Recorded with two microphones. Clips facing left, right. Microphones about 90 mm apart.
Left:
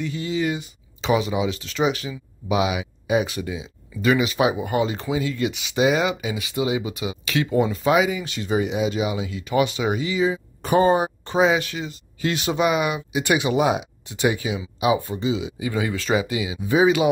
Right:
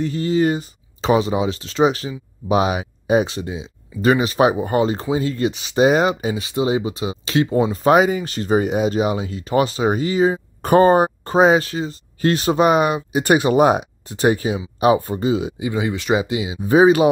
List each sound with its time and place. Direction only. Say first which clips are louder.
0.0 s speech: right 6 dB; 40° right (ahead or behind)
15.6 s speech: right 3 dB; 20° right (ahead or behind)
16.6 s speech: right 5 dB; 40° right (ahead or behind)